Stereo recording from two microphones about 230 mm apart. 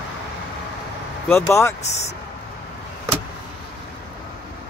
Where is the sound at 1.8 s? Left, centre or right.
Left.